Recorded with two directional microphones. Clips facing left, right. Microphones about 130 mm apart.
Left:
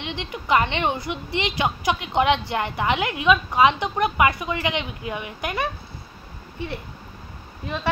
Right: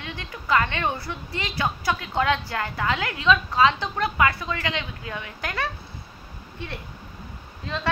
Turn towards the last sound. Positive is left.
turn(degrees=15)  # may be behind; listen again after turning